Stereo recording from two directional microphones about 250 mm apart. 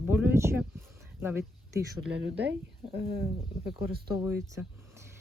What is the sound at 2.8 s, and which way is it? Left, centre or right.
Speech, right.